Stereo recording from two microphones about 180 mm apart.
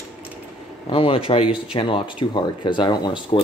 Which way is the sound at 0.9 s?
30° left (ahead or behind).